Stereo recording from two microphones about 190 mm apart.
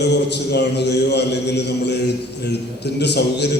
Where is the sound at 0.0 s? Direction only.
65° left (ahead or behind).